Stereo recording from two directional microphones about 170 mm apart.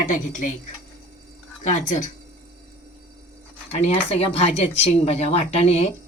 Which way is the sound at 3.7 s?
35° left (ahead or behind).